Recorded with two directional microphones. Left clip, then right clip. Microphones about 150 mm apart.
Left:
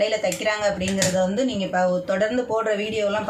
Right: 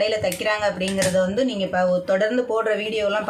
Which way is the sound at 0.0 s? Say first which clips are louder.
Even; 25° right (ahead or behind).